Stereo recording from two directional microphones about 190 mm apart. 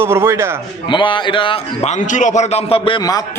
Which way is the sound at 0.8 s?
25° left (ahead or behind).